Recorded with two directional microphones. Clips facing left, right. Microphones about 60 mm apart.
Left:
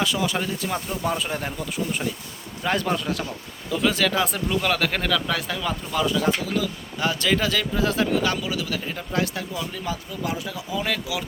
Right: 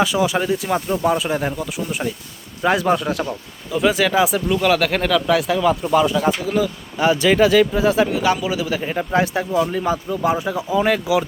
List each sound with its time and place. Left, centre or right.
0.0 s speech: centre
5.8 s speech: right
8.8 s speech: right